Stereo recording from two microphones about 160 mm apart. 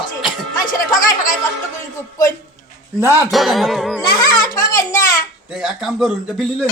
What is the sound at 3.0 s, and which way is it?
Speech, 15° right (ahead or behind).